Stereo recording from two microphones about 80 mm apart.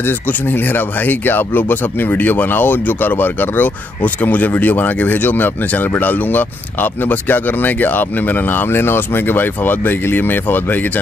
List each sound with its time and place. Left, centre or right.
0.0 s speech: left